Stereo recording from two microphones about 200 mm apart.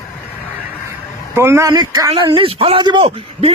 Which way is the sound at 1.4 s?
15° right (ahead or behind).